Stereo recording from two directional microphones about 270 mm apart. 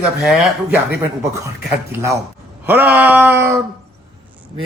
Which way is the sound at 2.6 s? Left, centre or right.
Centre.